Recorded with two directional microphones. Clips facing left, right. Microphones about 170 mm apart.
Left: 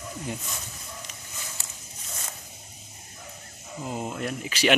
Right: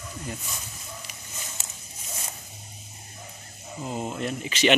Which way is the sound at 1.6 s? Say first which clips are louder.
Right 1 dB; 20° right (ahead or behind).